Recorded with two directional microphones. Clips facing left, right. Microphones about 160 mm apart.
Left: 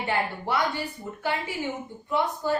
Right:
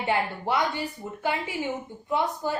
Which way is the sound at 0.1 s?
20° right (ahead or behind).